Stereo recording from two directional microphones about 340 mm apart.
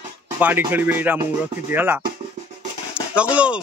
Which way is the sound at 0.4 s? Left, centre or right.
Centre.